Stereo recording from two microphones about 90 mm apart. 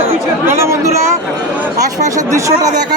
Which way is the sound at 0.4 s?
30° right (ahead or behind).